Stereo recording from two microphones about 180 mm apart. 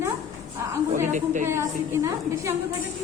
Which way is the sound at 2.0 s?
15° right (ahead or behind).